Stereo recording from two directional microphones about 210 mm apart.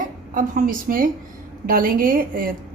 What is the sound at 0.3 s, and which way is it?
A woman's voice, 40° right (ahead or behind).